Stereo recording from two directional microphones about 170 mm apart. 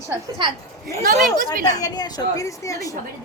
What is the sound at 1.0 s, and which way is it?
Speech, 60° right (ahead or behind).